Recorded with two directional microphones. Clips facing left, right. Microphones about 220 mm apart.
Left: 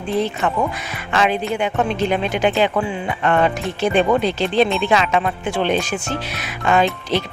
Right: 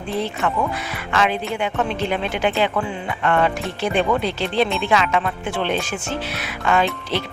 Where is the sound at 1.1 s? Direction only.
20° left (ahead or behind).